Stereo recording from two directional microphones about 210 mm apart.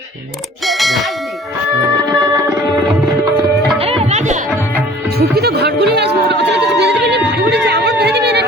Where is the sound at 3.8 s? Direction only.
25° right (ahead or behind).